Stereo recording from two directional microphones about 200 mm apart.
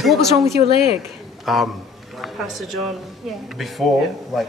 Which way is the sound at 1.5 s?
Centre (ahead or behind).